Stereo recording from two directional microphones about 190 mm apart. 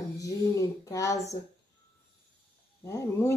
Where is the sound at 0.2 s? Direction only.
15° left (ahead or behind).